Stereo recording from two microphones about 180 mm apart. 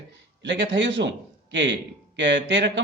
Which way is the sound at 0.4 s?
85° right.